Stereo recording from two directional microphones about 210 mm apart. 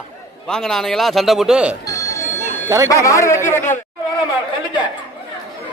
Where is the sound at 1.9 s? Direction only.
15° left (ahead or behind).